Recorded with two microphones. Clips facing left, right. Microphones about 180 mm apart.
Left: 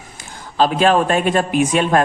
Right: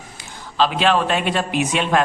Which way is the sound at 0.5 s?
45° left (ahead or behind).